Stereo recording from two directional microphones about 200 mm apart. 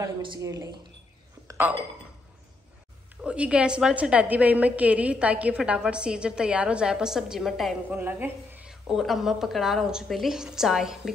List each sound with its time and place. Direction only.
0.0 s a woman's voice: 20° right (ahead or behind)
1.5 s a sound: 10° right (ahead or behind)
3.2 s a woman's voice: 5° right (ahead or behind)